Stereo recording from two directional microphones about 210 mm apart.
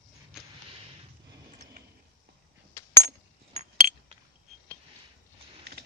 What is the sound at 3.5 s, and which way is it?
Chink, 35° right (ahead or behind).